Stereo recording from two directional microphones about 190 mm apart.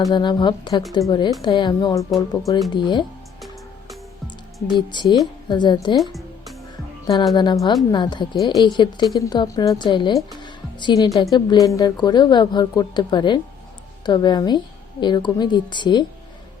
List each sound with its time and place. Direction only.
0.1 s speech: 25° left (ahead or behind)
2.0 s speech: centre (ahead or behind)
2.7 s speech: 25° left (ahead or behind)
5.0 s speech: centre (ahead or behind)
5.5 s speech: 25° left (ahead or behind)
6.0 s music: centre (ahead or behind)
7.3 s speech: 20° left (ahead or behind)